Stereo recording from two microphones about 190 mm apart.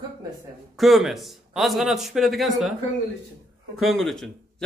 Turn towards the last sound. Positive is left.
turn(degrees=0)  # may be behind; listen again after turning